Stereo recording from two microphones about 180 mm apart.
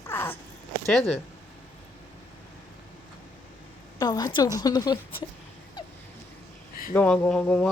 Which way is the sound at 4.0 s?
20° left (ahead or behind).